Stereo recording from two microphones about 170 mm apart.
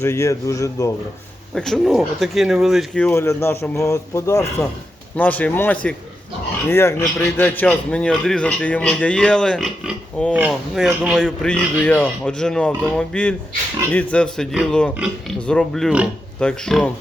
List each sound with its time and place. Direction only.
0.0 s speech: 15° left (ahead or behind)
1.5 s speech: 5° left (ahead or behind)